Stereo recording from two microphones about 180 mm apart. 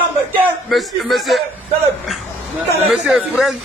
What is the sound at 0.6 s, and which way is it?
Speech, centre (ahead or behind).